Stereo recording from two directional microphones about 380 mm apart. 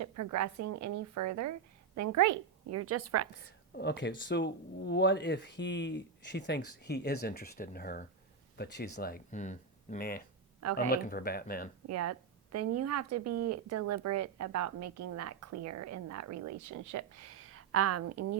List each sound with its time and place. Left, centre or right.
0.0 s a woman's voice: right
3.8 s speech: left
11.9 s speech: right